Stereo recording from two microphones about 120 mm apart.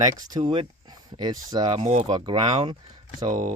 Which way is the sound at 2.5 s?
55° right (ahead or behind).